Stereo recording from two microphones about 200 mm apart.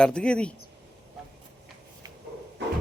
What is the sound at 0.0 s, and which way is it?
Speech, 5° left (ahead or behind).